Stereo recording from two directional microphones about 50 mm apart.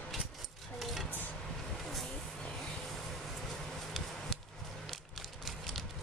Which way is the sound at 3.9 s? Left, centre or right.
Centre.